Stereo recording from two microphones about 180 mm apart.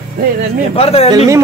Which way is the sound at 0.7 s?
35° left (ahead or behind).